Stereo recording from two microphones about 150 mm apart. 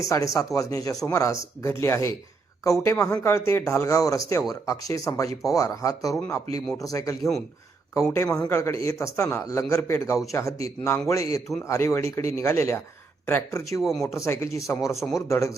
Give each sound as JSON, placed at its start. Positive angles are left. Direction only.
{"t": 0.0, "sound": "a man's voice", "side_deg": 20}
{"t": 7.2, "sound": "speech", "side_deg": 0}
{"t": 8.1, "sound": "a man's voice", "side_deg": 20}